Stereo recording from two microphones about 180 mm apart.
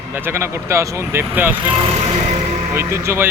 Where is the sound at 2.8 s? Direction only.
15° right (ahead or behind).